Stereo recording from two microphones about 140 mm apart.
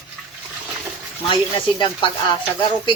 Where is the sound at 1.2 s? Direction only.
35° left (ahead or behind).